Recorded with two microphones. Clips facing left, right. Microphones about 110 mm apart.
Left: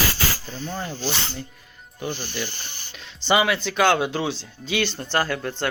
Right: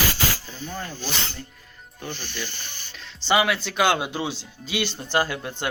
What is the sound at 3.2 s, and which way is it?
Speech, centre (ahead or behind).